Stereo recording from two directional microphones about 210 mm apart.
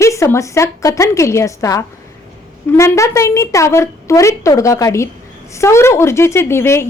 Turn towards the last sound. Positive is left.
turn(degrees=10)  # may be behind; listen again after turning